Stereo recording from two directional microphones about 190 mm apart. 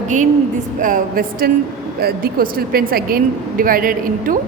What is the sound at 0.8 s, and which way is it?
A woman's voice, 45° right (ahead or behind).